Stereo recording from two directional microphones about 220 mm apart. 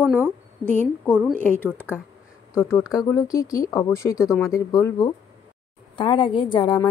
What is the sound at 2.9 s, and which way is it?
A woman's voice, 15° left (ahead or behind).